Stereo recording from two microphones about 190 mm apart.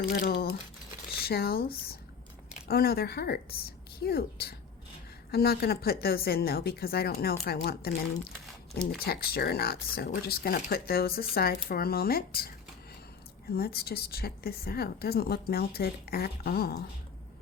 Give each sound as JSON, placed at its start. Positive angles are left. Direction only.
{"t": 0.0, "sound": "a woman's voice", "side_deg": 50}
{"t": 9.0, "sound": "speech", "side_deg": 55}
{"t": 13.6, "sound": "a woman's voice", "side_deg": 55}